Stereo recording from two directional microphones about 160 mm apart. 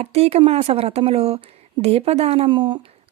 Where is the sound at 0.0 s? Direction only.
40° right (ahead or behind).